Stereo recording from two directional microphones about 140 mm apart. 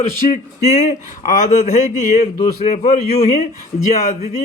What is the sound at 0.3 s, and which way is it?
Speech, 50° left (ahead or behind).